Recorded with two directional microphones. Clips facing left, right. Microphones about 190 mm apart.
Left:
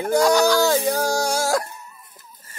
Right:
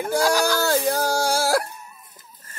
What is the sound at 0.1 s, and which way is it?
Speech, 5° right (ahead or behind).